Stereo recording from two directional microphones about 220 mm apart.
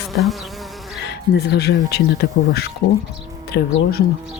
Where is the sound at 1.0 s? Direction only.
50° left (ahead or behind).